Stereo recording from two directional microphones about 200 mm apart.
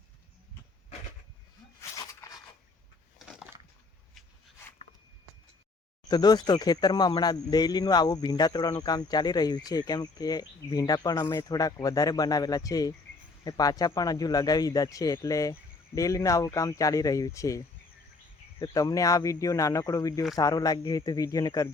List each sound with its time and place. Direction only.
2.2 s a sound: 15° left (ahead or behind)
6.1 s speech: 20° left (ahead or behind)
18.6 s speech: 15° left (ahead or behind)